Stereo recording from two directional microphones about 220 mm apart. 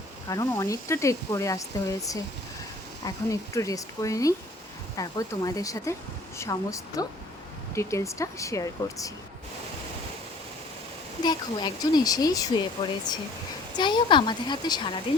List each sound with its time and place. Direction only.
0.3 s speech: 15° left (ahead or behind)
11.2 s speech: 20° left (ahead or behind)